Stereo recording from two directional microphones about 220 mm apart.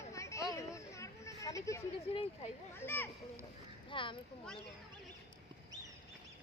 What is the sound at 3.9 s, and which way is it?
Speech, 20° left (ahead or behind).